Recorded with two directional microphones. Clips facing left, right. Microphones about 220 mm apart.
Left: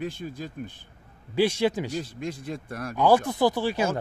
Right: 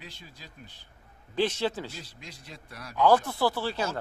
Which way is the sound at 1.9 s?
50° left (ahead or behind).